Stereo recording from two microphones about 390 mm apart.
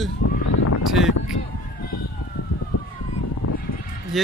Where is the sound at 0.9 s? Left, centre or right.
Centre.